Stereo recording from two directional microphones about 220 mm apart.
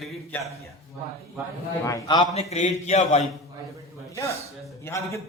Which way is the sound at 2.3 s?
30° left (ahead or behind).